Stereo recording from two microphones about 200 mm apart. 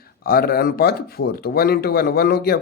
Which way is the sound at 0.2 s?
50° left (ahead or behind).